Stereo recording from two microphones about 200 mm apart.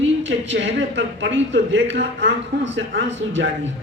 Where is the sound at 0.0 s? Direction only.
70° right (ahead or behind).